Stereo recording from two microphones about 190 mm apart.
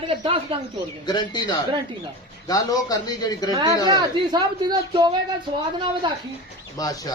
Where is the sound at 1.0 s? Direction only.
20° left (ahead or behind).